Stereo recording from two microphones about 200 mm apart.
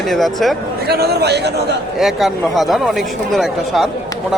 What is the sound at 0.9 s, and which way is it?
Speech, 55° right (ahead or behind).